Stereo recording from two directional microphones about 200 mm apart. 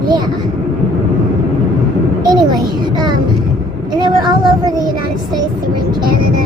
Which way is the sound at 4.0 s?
20° right (ahead or behind).